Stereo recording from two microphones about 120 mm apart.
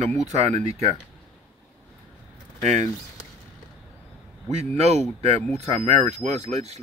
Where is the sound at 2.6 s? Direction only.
75° right (ahead or behind).